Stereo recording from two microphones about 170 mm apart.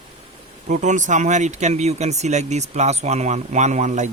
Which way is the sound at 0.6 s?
45° right (ahead or behind).